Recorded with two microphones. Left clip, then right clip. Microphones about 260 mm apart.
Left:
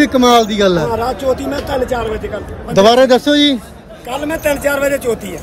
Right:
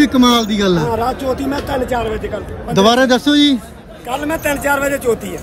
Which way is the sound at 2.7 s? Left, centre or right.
Centre.